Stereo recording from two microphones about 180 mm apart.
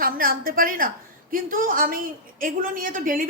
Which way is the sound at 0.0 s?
55° right (ahead or behind).